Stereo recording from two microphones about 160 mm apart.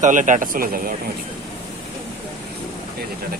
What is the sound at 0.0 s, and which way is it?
Speech, 50° right (ahead or behind).